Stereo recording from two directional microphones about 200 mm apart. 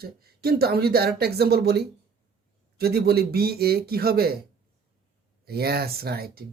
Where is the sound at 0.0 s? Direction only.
50° right (ahead or behind).